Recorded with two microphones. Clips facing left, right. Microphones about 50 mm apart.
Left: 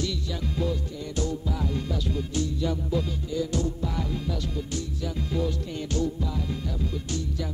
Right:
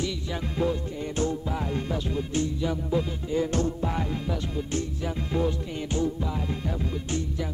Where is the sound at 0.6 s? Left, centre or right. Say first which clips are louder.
Right 4 dB; right.